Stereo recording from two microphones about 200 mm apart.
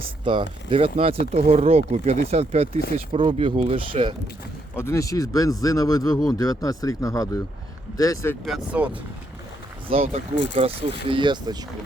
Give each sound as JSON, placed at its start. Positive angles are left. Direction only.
{"t": 0.7, "sound": "speech", "side_deg": -30}
{"t": 4.8, "sound": "speech", "side_deg": 15}
{"t": 8.4, "sound": "speech", "side_deg": -5}
{"t": 9.9, "sound": "speech", "side_deg": -30}